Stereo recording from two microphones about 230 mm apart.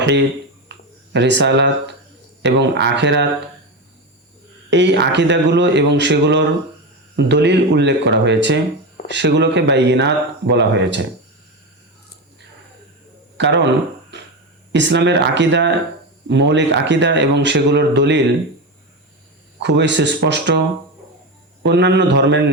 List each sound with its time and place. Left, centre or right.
0.0 s speech: right
0.7 s a sound: right
2.4 s speech: right
4.7 s speech: right
13.3 s speech: right
14.7 s speech: right
19.6 s speech: right
21.6 s speech: right